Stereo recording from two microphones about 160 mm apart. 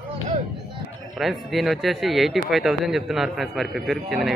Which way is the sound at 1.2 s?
Centre (ahead or behind).